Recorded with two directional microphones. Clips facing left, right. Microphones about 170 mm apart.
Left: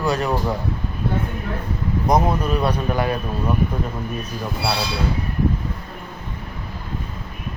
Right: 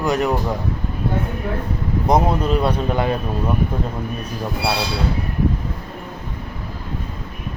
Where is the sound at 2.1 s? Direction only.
25° right (ahead or behind).